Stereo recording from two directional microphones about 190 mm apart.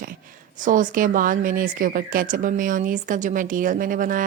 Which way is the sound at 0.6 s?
45° right (ahead or behind).